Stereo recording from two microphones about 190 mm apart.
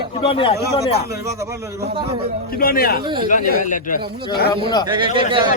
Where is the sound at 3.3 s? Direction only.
45° left (ahead or behind).